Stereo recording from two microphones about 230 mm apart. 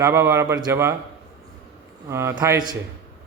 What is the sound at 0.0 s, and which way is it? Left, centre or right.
Speech, centre.